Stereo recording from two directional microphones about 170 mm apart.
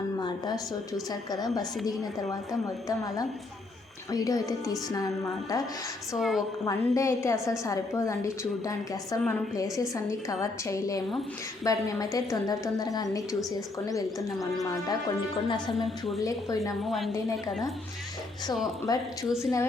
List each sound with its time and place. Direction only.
0.2 s a sound: 25° left (ahead or behind)
1.5 s a woman's voice: 20° left (ahead or behind)
6.1 s a woman's voice: centre (ahead or behind)
6.7 s a woman's voice: 20° left (ahead or behind)
9.9 s a woman's voice: 20° left (ahead or behind)
15.4 s a woman's voice: 25° left (ahead or behind)
15.7 s a woman's voice: centre (ahead or behind)
18.9 s a woman's voice: 20° left (ahead or behind)
19.3 s a woman's voice: 5° right (ahead or behind)